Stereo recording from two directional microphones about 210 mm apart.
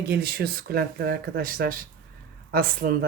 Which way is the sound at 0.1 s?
45° right (ahead or behind).